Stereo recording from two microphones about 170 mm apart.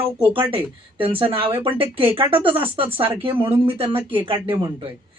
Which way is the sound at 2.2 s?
10° right (ahead or behind).